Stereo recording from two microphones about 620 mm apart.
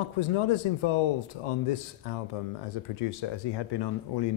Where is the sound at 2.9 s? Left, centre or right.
Left.